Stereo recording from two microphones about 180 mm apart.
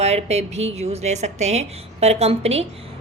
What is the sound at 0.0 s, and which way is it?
A woman's voice, 35° right (ahead or behind).